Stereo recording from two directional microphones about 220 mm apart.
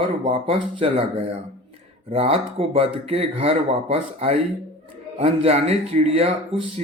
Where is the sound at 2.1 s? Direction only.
25° right (ahead or behind).